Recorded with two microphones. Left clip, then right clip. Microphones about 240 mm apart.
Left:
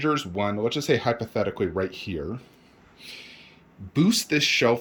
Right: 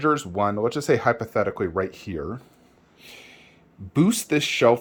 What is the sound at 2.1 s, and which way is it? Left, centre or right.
Speech, right.